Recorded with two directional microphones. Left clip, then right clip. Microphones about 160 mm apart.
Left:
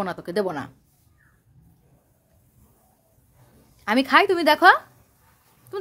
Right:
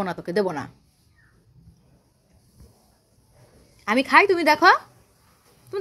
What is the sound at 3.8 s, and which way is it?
Speech, 15° left (ahead or behind).